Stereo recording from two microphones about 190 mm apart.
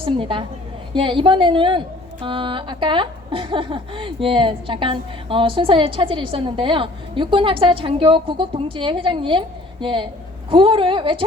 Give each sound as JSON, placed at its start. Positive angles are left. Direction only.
{"t": 0.0, "sound": "a woman's voice", "side_deg": -25}